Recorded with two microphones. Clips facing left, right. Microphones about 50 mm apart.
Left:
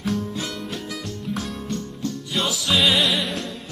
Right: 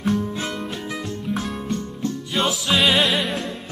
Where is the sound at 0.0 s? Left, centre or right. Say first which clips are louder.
Right 3 dB; centre.